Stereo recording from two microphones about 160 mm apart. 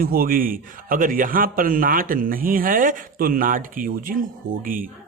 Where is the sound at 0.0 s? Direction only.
65° right (ahead or behind).